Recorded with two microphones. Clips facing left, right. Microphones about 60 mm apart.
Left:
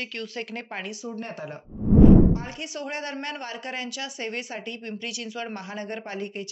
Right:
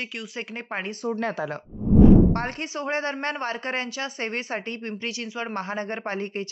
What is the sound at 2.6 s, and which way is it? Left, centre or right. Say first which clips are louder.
Speech: right 5 dB; right.